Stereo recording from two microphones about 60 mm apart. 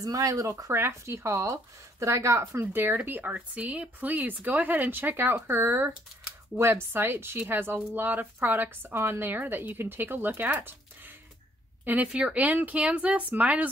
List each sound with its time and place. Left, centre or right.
0.0 s speech: right
2.8 s a woman's voice: right
12.4 s speech: right